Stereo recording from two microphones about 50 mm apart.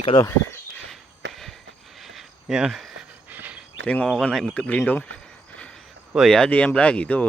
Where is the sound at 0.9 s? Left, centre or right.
Centre.